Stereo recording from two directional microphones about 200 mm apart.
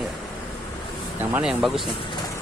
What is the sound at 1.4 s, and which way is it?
Speech, centre (ahead or behind).